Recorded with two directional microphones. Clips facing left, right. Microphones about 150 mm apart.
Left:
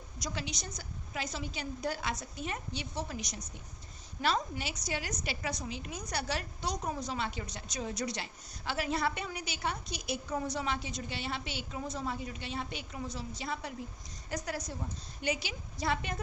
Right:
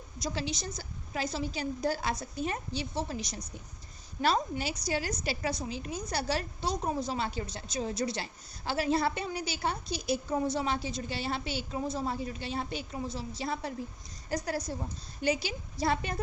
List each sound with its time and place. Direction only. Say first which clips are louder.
0.2 s a woman's voice: right 5 dB; 30° right (ahead or behind)